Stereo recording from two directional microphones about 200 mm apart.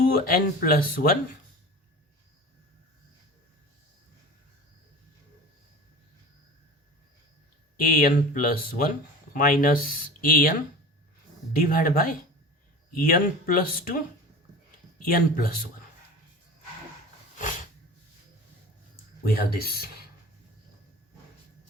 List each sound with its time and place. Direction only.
0.1 s speech: 45° left (ahead or behind)
7.8 s speech: 45° left (ahead or behind)
11.5 s speech: 45° left (ahead or behind)
14.9 s speech: 45° left (ahead or behind)
19.2 s speech: 50° left (ahead or behind)